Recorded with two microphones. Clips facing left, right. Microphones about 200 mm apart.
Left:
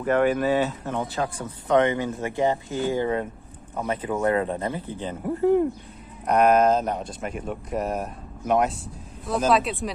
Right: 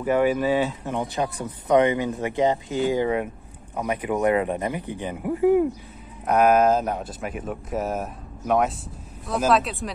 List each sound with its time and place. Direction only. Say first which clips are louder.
0.0 s speech: even; 5° right (ahead or behind)